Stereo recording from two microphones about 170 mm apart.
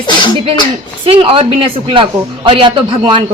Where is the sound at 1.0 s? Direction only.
30° right (ahead or behind).